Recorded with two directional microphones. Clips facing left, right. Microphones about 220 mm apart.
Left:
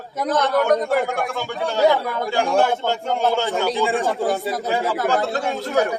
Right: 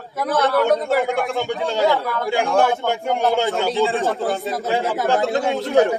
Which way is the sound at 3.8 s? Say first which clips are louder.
Right 1 dB; 15° left (ahead or behind).